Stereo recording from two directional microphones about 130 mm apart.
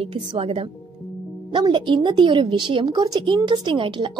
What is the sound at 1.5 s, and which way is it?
A woman's voice, 35° right (ahead or behind).